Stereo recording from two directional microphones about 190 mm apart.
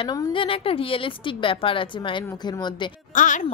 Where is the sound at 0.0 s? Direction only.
25° left (ahead or behind).